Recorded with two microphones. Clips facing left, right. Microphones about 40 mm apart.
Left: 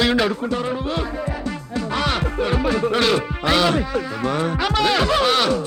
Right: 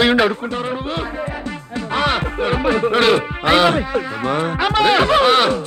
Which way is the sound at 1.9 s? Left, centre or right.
Right.